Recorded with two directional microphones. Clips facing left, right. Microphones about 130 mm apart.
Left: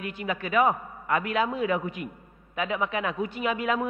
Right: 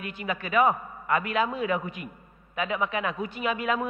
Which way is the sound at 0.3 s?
25° left (ahead or behind).